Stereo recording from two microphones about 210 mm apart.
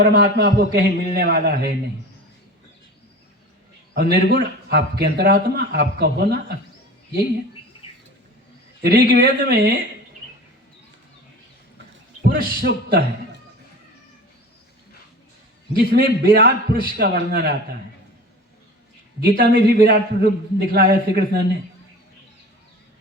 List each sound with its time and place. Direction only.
0.0 s a man's voice: 45° right (ahead or behind)
3.9 s a man's voice: 50° right (ahead or behind)
8.8 s a man's voice: 45° right (ahead or behind)
12.2 s a man's voice: 45° right (ahead or behind)
15.7 s a man's voice: 45° right (ahead or behind)
19.2 s a man's voice: 45° right (ahead or behind)